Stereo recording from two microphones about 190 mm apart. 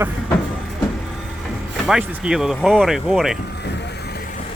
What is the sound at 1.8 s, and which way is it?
Speech, 5° right (ahead or behind).